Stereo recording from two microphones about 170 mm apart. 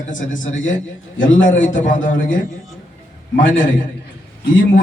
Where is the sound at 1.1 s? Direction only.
90° left.